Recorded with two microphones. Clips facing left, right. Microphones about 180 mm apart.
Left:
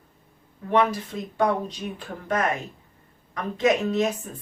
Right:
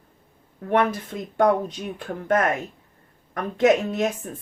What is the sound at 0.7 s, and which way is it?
Speech, 55° right (ahead or behind).